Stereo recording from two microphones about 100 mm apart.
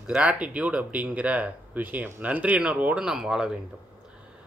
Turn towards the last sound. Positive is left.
turn(degrees=-10)  # may be behind; listen again after turning